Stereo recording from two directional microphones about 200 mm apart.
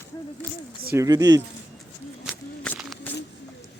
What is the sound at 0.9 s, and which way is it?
Speech, 15° right (ahead or behind).